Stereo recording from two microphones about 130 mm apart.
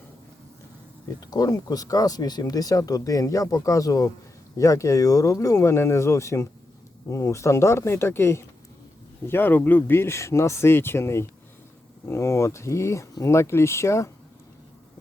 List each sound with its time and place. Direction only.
1.0 s speech: 30° left (ahead or behind)